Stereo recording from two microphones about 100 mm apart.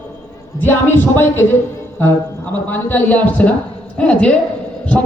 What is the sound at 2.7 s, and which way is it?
Speech, 20° left (ahead or behind).